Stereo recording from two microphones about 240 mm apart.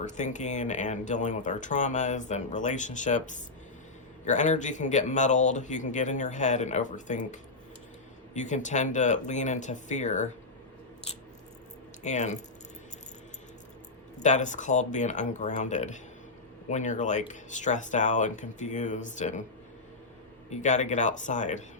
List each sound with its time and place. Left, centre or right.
0.0 s speech: left
12.0 s speech: left
14.2 s speech: left
20.5 s speech: left